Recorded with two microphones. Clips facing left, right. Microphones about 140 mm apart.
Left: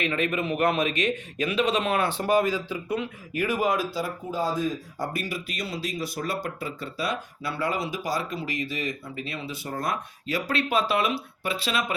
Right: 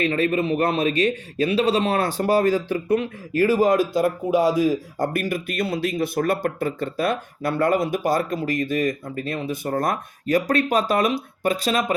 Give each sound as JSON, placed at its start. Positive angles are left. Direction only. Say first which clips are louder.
{"t": 0.0, "sound": "a man's voice", "louder": "right 6 dB", "side_deg": -35}
{"t": 3.4, "sound": "a man's voice", "louder": "right 7 dB", "side_deg": -35}
{"t": 3.9, "sound": "speech", "louder": "right 10 dB", "side_deg": -65}
{"t": 4.9, "sound": "speech", "louder": "right 7 dB", "side_deg": -50}